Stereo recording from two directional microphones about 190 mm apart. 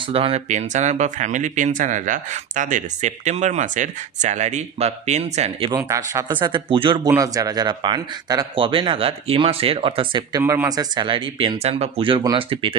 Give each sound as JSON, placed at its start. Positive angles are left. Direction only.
{"t": 0.1, "sound": "speech", "side_deg": -30}
{"t": 10.4, "sound": "speech", "side_deg": -15}